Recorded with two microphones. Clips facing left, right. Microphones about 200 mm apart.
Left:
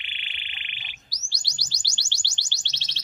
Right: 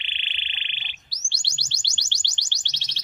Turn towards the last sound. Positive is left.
turn(degrees=-15)  # may be behind; listen again after turning